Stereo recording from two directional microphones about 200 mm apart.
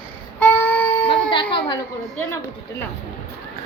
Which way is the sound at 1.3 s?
25° left (ahead or behind).